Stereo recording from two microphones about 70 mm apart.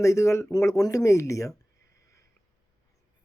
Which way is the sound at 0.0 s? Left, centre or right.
Left.